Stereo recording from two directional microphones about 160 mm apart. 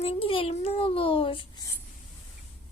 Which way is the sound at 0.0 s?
35° left (ahead or behind).